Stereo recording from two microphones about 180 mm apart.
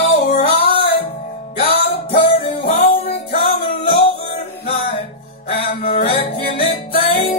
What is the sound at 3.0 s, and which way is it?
Music, 60° left (ahead or behind).